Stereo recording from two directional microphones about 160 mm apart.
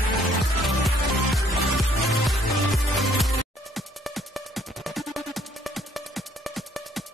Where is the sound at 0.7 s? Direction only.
Centre (ahead or behind).